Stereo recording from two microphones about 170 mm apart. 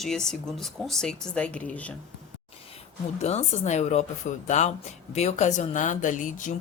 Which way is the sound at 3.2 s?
40° left (ahead or behind).